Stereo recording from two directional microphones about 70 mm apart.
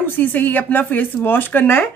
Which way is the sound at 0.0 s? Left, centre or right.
Left.